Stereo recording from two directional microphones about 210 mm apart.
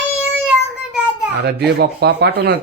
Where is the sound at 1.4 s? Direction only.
50° right (ahead or behind).